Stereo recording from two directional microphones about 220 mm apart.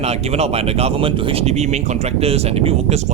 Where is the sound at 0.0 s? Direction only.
30° right (ahead or behind).